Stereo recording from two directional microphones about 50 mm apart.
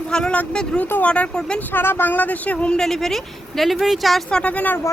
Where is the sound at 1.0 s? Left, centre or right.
Left.